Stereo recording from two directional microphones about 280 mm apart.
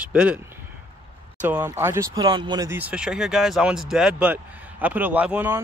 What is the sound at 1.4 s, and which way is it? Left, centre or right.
Speech, centre.